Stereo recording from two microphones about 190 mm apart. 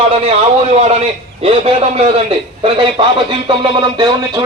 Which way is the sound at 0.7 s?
35° right (ahead or behind).